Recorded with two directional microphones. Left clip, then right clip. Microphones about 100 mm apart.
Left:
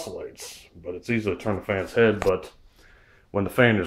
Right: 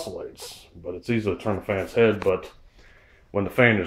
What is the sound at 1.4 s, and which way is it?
Speech, centre (ahead or behind).